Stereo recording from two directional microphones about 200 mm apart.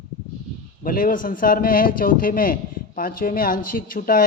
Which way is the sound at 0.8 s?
45° left (ahead or behind).